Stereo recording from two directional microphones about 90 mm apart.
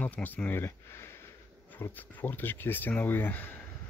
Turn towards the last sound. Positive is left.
turn(degrees=20)  # may be behind; listen again after turning